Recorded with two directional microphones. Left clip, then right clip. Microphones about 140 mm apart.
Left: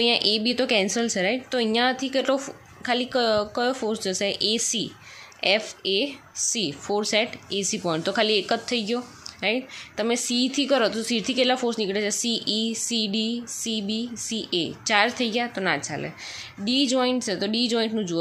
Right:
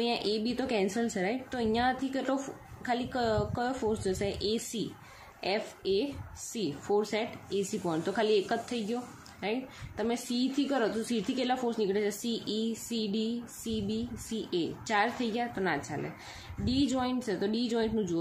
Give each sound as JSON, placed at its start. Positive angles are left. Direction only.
{"t": 0.0, "sound": "speech", "side_deg": 30}